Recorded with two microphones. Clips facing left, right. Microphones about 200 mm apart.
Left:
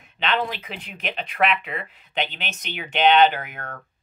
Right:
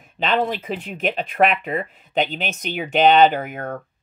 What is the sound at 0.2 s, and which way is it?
Speech, 45° right (ahead or behind).